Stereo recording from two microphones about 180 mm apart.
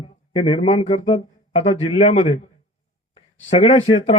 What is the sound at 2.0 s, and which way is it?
Speech, 45° left (ahead or behind).